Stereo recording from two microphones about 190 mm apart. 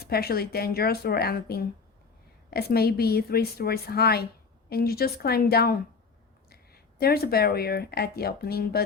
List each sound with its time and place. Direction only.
0.0 s a woman's voice: 55° left (ahead or behind)